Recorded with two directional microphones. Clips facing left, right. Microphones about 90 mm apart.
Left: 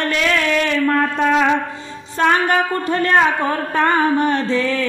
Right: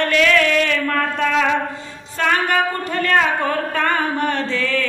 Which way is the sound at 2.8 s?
25° left (ahead or behind).